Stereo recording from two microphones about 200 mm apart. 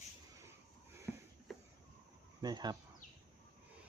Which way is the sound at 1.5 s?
Centre (ahead or behind).